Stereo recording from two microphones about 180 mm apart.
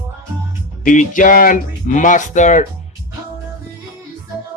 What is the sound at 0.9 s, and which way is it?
Speech, 45° left (ahead or behind).